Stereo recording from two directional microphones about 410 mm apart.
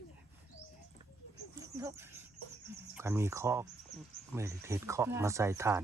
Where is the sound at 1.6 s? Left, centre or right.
Centre.